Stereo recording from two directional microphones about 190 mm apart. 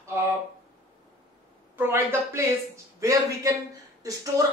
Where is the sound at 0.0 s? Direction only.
15° right (ahead or behind).